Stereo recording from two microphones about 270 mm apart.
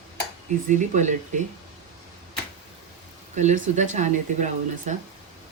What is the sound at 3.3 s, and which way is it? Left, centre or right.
Speech, right.